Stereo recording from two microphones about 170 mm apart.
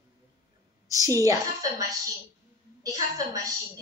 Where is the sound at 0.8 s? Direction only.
20° right (ahead or behind).